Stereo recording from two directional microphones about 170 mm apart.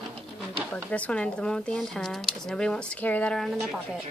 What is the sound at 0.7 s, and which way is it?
Speech, 5° left (ahead or behind).